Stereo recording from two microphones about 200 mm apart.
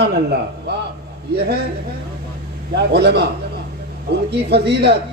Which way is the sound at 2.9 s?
60° right (ahead or behind).